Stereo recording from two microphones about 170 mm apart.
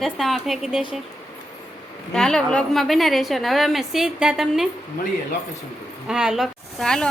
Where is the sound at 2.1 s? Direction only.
5° left (ahead or behind).